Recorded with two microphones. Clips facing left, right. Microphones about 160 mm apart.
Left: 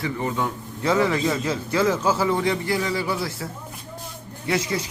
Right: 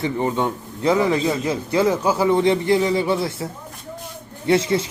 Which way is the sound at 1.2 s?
15° right (ahead or behind).